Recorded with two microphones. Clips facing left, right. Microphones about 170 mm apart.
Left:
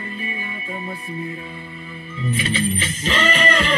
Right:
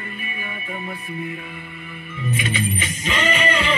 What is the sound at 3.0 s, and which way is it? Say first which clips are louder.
Music: left 1 dB; 40° left (ahead or behind).